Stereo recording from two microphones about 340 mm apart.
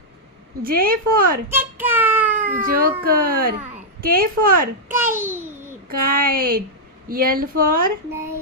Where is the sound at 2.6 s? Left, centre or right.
Right.